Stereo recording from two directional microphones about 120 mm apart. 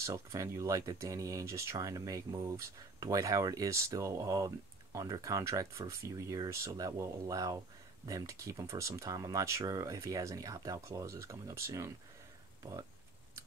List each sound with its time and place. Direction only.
0.0 s speech: 25° right (ahead or behind)